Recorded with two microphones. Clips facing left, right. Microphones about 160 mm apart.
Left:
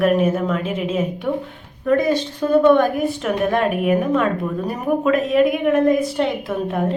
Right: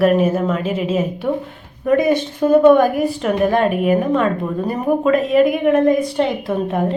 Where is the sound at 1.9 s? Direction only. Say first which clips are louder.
Right 2 dB; 20° right (ahead or behind); by 6.8 s centre (ahead or behind).